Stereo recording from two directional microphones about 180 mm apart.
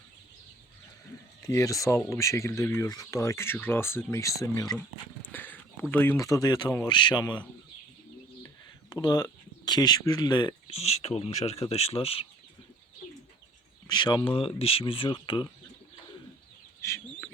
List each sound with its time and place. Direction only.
1.4 s speech: 15° left (ahead or behind)
5.2 s a sound: 10° left (ahead or behind)
5.9 s speech: 10° left (ahead or behind)
8.9 s speech: 20° left (ahead or behind)
13.8 s speech: 25° left (ahead or behind)
16.8 s chicken: 15° left (ahead or behind)